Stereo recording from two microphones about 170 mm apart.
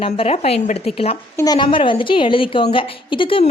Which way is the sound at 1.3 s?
20° left (ahead or behind).